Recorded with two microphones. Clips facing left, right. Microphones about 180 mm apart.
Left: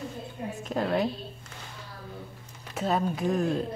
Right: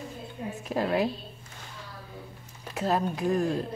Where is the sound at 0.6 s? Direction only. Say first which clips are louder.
Right 1 dB; 5° right (ahead or behind).